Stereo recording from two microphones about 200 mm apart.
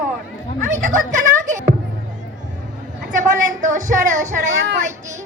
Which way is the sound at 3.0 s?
40° right (ahead or behind).